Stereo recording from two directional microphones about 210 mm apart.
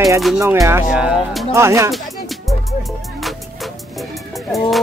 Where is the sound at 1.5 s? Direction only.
15° right (ahead or behind).